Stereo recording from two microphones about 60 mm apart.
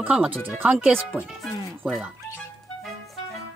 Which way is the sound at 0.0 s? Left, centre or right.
Right.